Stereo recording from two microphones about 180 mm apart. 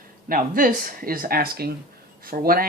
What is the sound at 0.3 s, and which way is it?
Speech, 50° right (ahead or behind).